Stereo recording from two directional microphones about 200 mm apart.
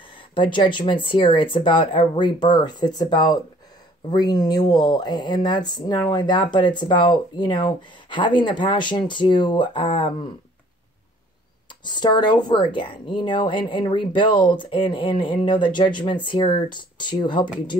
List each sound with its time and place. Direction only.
0.3 s speech: 25° left (ahead or behind)
11.8 s speech: 20° left (ahead or behind)